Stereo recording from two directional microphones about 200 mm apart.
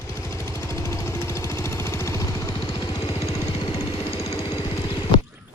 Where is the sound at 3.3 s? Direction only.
25° left (ahead or behind).